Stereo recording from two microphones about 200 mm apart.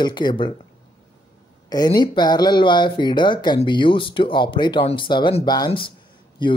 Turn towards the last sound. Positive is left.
turn(degrees=25)  # may be behind; listen again after turning